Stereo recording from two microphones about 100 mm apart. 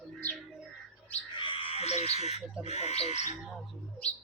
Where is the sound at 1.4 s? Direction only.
60° left (ahead or behind); by 3.2 s 90° left.